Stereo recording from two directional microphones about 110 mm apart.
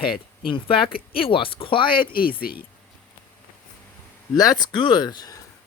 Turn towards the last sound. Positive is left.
turn(degrees=40)  # may be behind; listen again after turning